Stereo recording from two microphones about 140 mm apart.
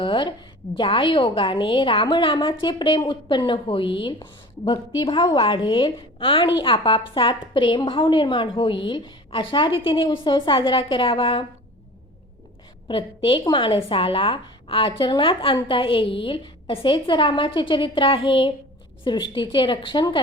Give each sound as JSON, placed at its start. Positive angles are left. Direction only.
{"t": 0.0, "sound": "a woman's voice", "side_deg": 35}
{"t": 12.9, "sound": "a woman's voice", "side_deg": 40}